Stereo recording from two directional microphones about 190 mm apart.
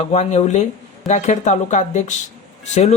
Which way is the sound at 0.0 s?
35° left (ahead or behind).